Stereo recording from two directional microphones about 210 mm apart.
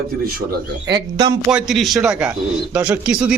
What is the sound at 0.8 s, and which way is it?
Speech, 20° right (ahead or behind).